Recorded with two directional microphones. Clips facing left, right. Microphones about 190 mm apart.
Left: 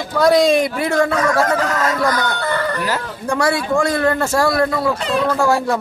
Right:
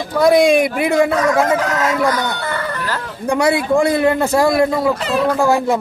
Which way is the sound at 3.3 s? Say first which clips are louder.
Right 3 dB; 20° right (ahead or behind).